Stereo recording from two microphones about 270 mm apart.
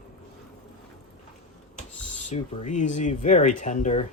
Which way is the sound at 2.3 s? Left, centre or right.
Left.